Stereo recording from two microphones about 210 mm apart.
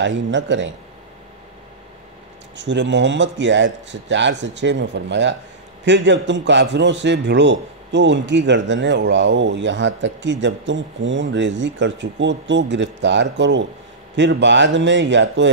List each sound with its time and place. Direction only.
0.0 s a man's voice: 60° right (ahead or behind)
2.5 s a man's voice: 55° right (ahead or behind)